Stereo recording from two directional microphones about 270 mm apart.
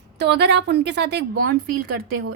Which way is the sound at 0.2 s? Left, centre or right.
Right.